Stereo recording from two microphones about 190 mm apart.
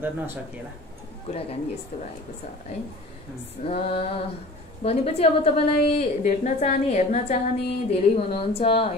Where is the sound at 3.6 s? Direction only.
30° left (ahead or behind).